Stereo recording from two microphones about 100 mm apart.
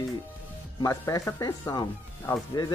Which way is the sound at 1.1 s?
35° left (ahead or behind).